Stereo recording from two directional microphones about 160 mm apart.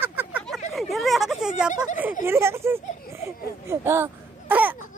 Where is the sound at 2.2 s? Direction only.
15° right (ahead or behind).